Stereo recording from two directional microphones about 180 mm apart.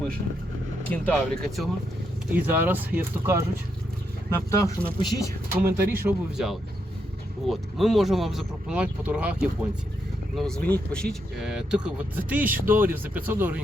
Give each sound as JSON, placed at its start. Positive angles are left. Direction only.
{"t": 0.9, "sound": "speech", "side_deg": 5}
{"t": 2.3, "sound": "speech", "side_deg": -10}
{"t": 4.3, "sound": "speech", "side_deg": 15}
{"t": 5.6, "sound": "speech", "side_deg": -15}